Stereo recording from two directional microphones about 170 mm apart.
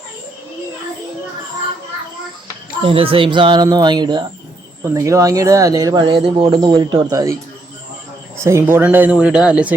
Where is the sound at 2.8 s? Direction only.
35° right (ahead or behind).